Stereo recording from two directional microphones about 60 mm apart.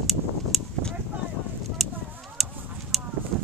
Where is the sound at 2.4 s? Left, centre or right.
Centre.